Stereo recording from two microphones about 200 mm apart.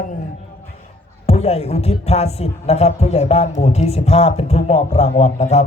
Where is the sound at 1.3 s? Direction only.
30° left (ahead or behind).